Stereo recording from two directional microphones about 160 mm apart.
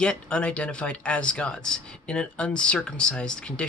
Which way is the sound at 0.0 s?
5° left (ahead or behind).